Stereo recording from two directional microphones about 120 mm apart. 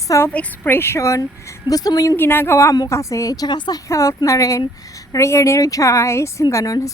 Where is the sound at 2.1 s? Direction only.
20° left (ahead or behind).